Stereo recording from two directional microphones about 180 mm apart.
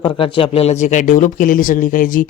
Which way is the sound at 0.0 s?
30° left (ahead or behind).